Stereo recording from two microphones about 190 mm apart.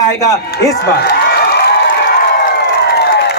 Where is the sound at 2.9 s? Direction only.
60° left (ahead or behind).